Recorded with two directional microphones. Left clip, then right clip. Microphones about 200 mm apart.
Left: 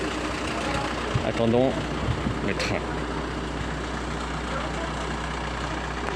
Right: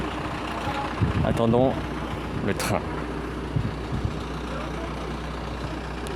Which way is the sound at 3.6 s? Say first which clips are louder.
Left 2 dB; 35° left (ahead or behind).